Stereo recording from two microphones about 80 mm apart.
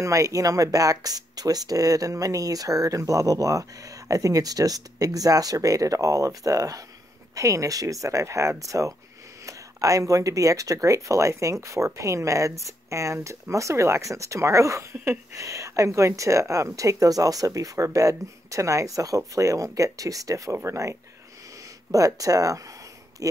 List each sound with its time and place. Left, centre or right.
0.0 s speech: right